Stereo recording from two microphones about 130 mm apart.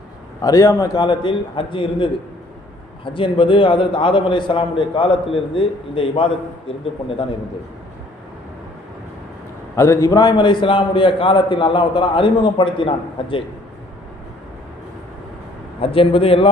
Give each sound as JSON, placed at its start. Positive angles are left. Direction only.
{"t": 0.4, "sound": "a man's voice", "side_deg": 25}
{"t": 9.7, "sound": "a man's voice", "side_deg": 20}
{"t": 15.8, "sound": "a man's voice", "side_deg": 45}